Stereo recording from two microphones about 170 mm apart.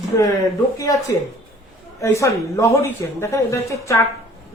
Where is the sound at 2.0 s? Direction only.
15° left (ahead or behind).